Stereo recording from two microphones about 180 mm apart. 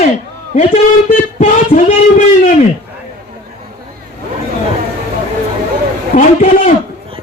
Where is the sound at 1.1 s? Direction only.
45° left (ahead or behind).